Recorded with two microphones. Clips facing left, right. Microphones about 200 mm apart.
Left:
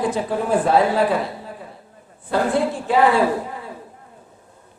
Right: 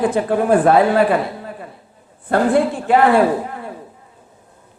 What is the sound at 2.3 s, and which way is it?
A woman's voice, 55° right (ahead or behind).